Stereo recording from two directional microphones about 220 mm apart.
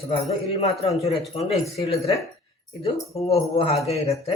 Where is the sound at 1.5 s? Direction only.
30° left (ahead or behind).